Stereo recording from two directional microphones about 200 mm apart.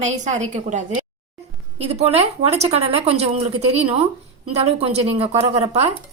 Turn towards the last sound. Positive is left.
turn(degrees=-35)  # may be behind; listen again after turning